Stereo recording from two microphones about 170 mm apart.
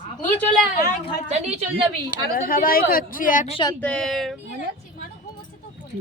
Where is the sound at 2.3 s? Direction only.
55° left (ahead or behind).